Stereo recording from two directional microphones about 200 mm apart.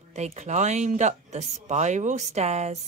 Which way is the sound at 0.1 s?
35° right (ahead or behind).